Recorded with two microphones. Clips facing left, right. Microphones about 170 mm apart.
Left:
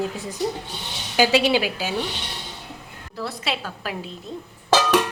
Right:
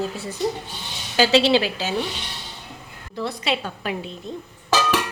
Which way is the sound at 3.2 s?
Centre (ahead or behind).